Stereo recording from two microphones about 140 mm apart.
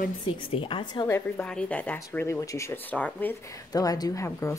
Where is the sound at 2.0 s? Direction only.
20° left (ahead or behind).